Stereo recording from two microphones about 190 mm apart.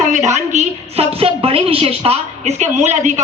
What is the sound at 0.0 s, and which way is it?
Speech, 40° right (ahead or behind).